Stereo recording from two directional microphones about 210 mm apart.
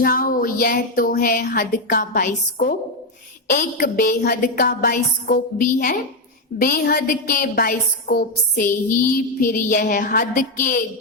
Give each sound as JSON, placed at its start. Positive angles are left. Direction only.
{"t": 0.0, "sound": "a woman's voice", "side_deg": 45}